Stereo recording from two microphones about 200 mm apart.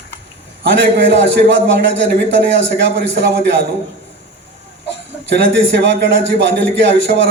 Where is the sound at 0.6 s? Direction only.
60° right (ahead or behind).